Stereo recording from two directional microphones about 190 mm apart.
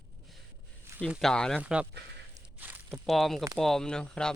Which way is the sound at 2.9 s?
Centre (ahead or behind).